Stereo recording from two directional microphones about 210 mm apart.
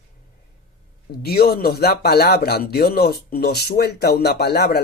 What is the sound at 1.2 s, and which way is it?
Speech, 50° left (ahead or behind).